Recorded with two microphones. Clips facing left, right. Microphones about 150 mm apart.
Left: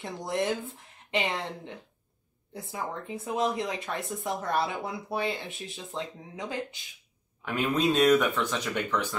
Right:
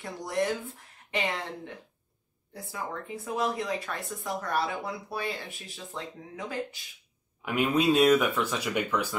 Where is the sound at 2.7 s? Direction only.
20° left (ahead or behind).